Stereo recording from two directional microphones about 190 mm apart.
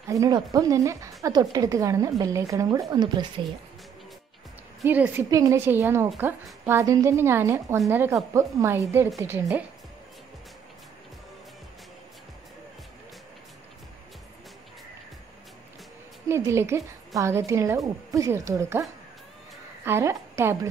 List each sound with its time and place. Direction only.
0.1 s a woman's voice: 20° right (ahead or behind)
4.8 s a woman's voice: 10° right (ahead or behind)
16.3 s a woman's voice: 15° right (ahead or behind)